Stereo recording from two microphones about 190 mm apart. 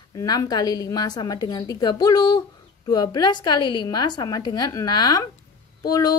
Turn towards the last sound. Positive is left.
turn(degrees=20)  # may be behind; listen again after turning